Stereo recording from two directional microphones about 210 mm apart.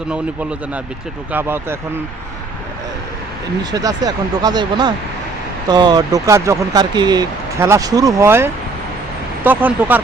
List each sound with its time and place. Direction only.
1.3 s speech: 10° right (ahead or behind)
3.6 s speech: 20° right (ahead or behind)